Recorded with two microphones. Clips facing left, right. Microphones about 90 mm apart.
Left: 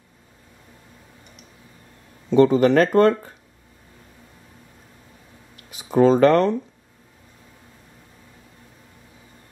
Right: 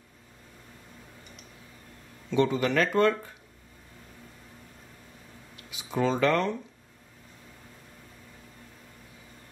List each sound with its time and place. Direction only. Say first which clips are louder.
2.3 s speech: left 10 dB; 40° left (ahead or behind)
5.6 s speech: left 11 dB; 45° left (ahead or behind)